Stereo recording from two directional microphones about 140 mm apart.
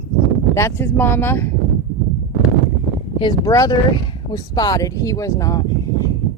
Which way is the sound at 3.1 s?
35° left (ahead or behind).